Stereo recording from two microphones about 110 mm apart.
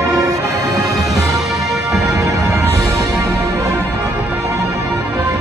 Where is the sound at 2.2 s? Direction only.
25° right (ahead or behind).